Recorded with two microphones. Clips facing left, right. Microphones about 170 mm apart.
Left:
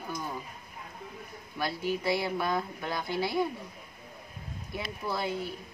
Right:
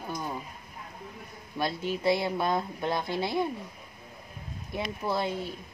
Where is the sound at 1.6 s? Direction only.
25° right (ahead or behind).